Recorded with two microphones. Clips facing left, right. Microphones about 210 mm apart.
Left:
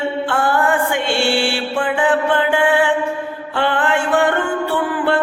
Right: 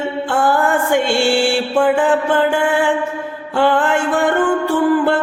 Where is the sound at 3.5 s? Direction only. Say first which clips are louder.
Right 5 dB; 45° right (ahead or behind).